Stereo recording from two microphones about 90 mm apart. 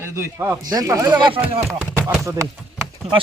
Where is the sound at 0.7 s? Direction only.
40° right (ahead or behind).